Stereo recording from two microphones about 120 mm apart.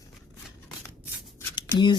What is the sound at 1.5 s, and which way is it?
Shuffling cards, 40° left (ahead or behind).